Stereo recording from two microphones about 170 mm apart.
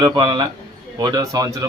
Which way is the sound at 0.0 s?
25° right (ahead or behind).